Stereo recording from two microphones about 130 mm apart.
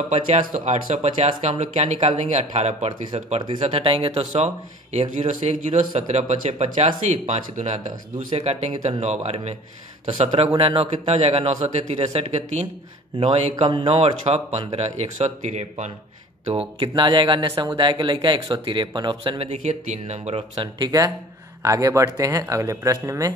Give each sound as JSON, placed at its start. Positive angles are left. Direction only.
{"t": 0.1, "sound": "speech", "side_deg": -60}
{"t": 3.6, "sound": "a man's voice", "side_deg": -45}
{"t": 5.1, "sound": "speech", "side_deg": -60}
{"t": 8.3, "sound": "a man's voice", "side_deg": -55}
{"t": 16.8, "sound": "speech", "side_deg": -35}
{"t": 19.6, "sound": "speech", "side_deg": -60}
{"t": 20.5, "sound": "speech", "side_deg": -35}